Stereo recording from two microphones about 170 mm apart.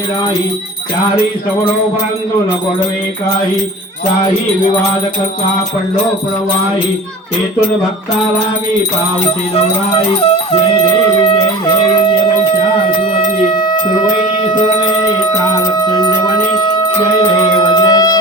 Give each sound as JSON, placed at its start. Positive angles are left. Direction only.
{"t": 10.1, "sound": "music", "side_deg": 35}
{"t": 15.8, "sound": "a sound", "side_deg": 25}
{"t": 17.6, "sound": "music", "side_deg": 25}